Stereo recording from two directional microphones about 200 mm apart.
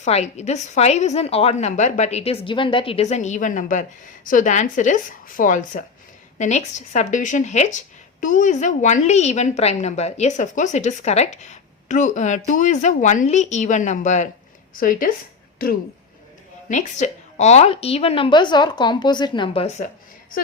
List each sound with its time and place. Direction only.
0.0 s a woman's voice: 35° left (ahead or behind)
16.6 s a woman's voice: 35° left (ahead or behind)